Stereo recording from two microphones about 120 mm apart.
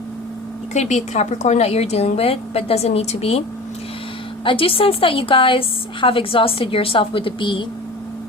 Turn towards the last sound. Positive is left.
turn(degrees=40)  # may be behind; listen again after turning